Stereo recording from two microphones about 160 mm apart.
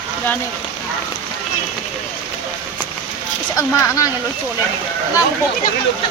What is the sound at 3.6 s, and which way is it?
Speech, 20° left (ahead or behind).